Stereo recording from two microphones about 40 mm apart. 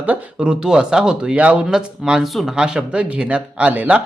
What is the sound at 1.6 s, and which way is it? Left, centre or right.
Speech, centre.